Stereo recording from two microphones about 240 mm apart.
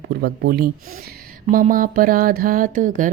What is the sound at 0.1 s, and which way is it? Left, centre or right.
A woman's voice, right.